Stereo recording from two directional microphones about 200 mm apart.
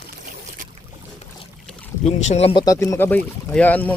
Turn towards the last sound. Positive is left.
turn(degrees=10)  # may be behind; listen again after turning